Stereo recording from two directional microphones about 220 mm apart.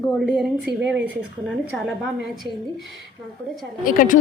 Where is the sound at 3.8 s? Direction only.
40° left (ahead or behind).